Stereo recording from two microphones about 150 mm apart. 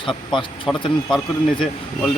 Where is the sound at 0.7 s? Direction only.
Centre (ahead or behind).